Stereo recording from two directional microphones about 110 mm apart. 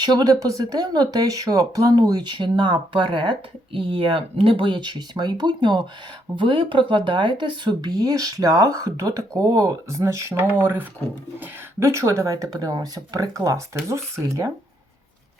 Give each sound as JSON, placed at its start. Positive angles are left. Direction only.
{"t": 0.0, "sound": "speech", "side_deg": -40}